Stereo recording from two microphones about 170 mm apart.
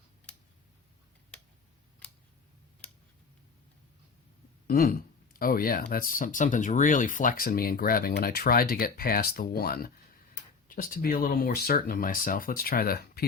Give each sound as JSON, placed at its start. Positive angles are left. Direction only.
{"t": 4.6, "sound": "speech", "side_deg": 60}